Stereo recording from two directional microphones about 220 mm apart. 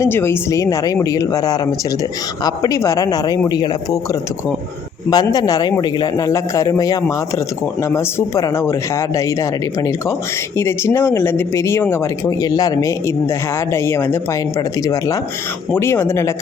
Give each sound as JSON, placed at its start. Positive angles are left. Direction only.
{"t": 0.0, "sound": "a man's voice", "side_deg": 10}
{"t": 5.1, "sound": "a man's voice", "side_deg": 15}